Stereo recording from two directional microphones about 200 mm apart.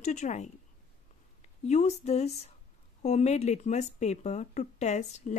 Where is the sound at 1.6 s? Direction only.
35° left (ahead or behind).